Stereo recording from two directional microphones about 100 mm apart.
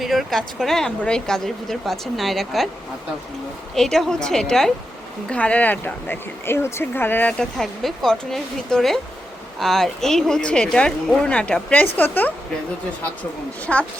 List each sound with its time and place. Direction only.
0.0 s speech: centre (ahead or behind)
3.8 s speech: 5° left (ahead or behind)
13.7 s speech: 5° left (ahead or behind)